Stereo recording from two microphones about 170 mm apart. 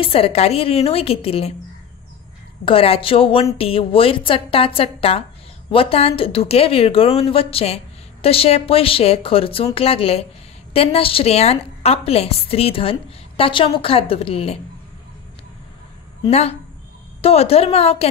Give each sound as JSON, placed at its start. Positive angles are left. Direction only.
{"t": 0.0, "sound": "a woman's voice", "side_deg": 35}
{"t": 2.6, "sound": "a woman's voice", "side_deg": 35}
{"t": 16.2, "sound": "a woman's voice", "side_deg": 35}